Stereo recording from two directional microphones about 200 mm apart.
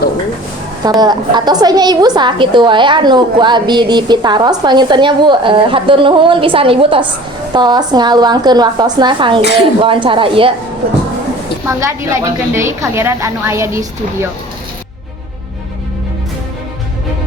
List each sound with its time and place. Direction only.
0.9 s a woman's voice: 20° right (ahead or behind)
11.6 s a woman's voice: 15° right (ahead or behind)